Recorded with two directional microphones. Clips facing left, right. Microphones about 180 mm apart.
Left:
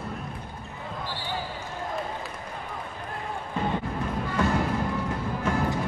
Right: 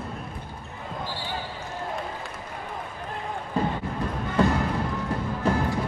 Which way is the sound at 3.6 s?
35° right (ahead or behind).